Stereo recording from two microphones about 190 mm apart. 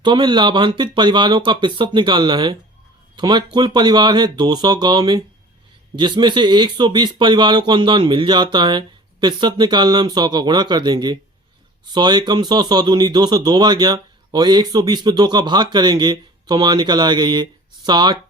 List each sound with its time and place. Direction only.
0.0 s speech: 25° right (ahead or behind)